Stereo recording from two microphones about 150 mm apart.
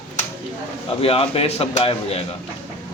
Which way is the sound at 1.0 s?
40° left (ahead or behind).